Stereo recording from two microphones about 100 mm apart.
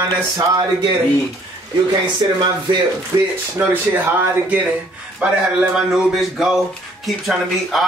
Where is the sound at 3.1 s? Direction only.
35° right (ahead or behind).